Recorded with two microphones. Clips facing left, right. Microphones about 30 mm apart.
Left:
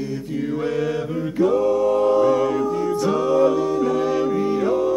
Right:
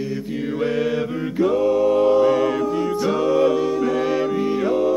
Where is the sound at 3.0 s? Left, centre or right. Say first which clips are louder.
Even; centre.